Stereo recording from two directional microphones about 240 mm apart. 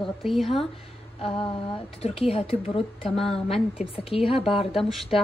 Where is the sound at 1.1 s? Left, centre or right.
Left.